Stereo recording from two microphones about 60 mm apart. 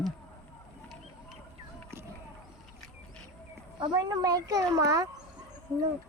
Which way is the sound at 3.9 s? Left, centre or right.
Right.